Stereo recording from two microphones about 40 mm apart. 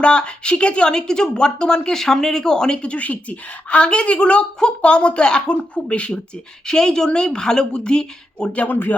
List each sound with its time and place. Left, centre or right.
0.0 s speech: left
3.0 s a woman's voice: left
6.7 s a woman's voice: centre
8.6 s speech: left